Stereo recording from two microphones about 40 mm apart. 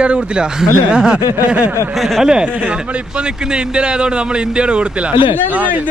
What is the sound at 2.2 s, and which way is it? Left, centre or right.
Speech, right.